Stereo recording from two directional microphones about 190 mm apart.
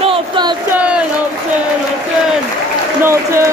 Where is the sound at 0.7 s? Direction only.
5° right (ahead or behind).